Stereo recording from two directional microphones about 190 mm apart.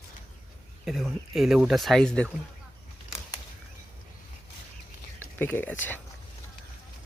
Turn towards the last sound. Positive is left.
turn(degrees=10)  # may be behind; listen again after turning